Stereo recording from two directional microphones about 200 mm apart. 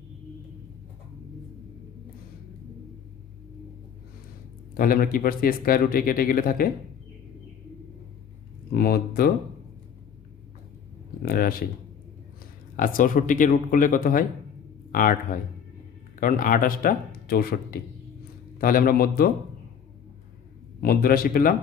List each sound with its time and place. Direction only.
4.7 s speech: 45° left (ahead or behind)
8.7 s speech: 50° left (ahead or behind)
11.2 s speech: 45° left (ahead or behind)
12.7 s a man's voice: 45° left (ahead or behind)
16.2 s speech: 45° left (ahead or behind)
20.8 s speech: 45° left (ahead or behind)